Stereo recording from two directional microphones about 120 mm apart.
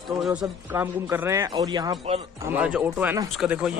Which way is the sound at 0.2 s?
5° right (ahead or behind).